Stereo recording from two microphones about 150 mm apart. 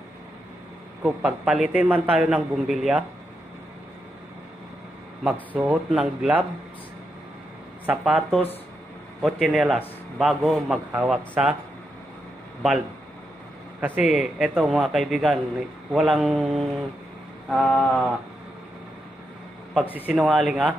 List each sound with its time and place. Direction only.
1.0 s a man's voice: 5° right (ahead or behind)
5.2 s a man's voice: 10° right (ahead or behind)
7.8 s a man's voice: 10° right (ahead or behind)
13.7 s a man's voice: 10° right (ahead or behind)
19.9 s a man's voice: 10° right (ahead or behind)